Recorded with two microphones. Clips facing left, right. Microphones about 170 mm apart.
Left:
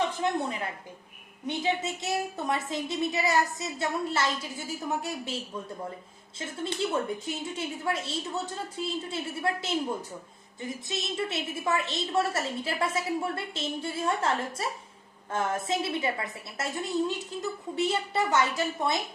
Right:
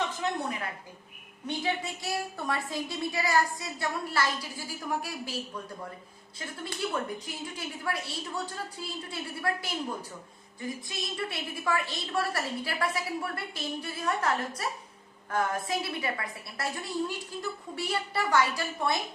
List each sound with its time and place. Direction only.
0.2 s a woman's voice: 25° left (ahead or behind)
6.7 s a woman's voice: 25° left (ahead or behind)